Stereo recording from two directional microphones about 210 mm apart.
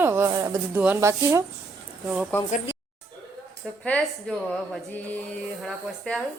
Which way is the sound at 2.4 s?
35° left (ahead or behind).